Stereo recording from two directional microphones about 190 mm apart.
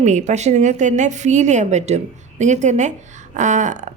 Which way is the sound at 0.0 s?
40° right (ahead or behind).